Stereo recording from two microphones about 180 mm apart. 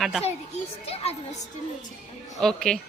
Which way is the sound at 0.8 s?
35° left (ahead or behind).